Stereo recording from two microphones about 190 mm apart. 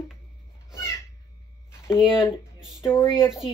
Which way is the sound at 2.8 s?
10° left (ahead or behind).